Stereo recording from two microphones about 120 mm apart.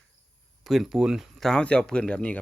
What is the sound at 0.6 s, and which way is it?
Speech, centre (ahead or behind).